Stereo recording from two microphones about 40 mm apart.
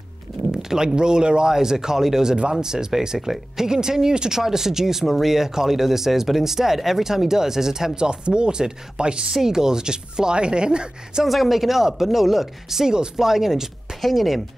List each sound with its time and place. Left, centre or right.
0.5 s speech: centre
9.4 s speech: centre
11.2 s speech: centre